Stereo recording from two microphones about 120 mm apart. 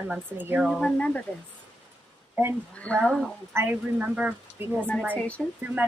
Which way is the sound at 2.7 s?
10° left (ahead or behind).